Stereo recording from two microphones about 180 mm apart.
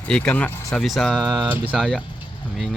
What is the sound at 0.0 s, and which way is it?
Speech, 5° left (ahead or behind).